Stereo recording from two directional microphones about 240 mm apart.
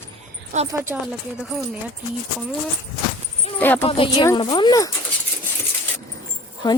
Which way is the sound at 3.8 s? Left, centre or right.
Left.